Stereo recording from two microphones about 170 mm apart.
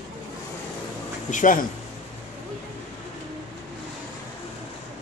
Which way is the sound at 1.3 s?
50° left (ahead or behind).